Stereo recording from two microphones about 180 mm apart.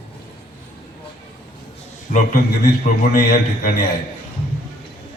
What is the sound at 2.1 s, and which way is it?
A man's voice, 45° left (ahead or behind).